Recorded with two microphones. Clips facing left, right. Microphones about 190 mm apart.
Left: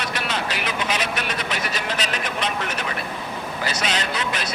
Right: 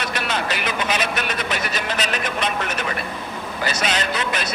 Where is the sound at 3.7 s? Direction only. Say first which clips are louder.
Right 3 dB; 55° right (ahead or behind).